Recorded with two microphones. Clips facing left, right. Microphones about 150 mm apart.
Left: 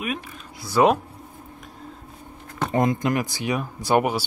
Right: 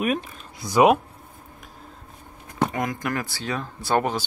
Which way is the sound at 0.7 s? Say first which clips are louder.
Right 1 dB; 15° right (ahead or behind).